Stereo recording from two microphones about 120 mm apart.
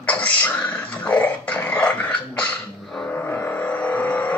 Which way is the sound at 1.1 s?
10° left (ahead or behind).